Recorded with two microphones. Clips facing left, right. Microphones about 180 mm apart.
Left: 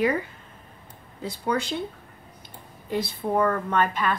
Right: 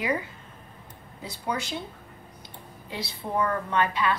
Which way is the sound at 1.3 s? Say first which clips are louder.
Left 5 dB; 55° left (ahead or behind).